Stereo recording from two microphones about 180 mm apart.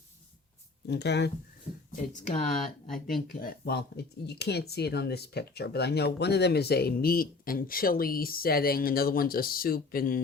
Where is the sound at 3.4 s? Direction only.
55° left (ahead or behind).